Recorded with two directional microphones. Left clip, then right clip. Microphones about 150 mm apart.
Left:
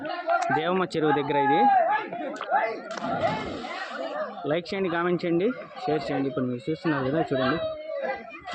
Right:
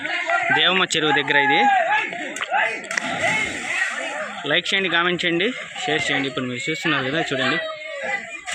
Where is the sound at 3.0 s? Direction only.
15° right (ahead or behind).